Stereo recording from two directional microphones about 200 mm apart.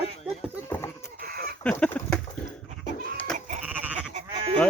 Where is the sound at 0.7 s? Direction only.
15° left (ahead or behind).